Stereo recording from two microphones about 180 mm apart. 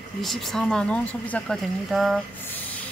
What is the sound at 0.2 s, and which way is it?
A woman's voice, centre (ahead or behind).